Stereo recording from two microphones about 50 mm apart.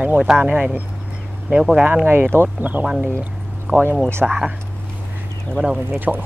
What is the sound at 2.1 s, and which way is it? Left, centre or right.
Speech, right.